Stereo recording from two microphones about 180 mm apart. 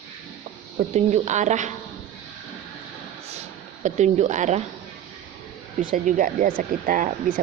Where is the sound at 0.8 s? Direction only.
40° right (ahead or behind).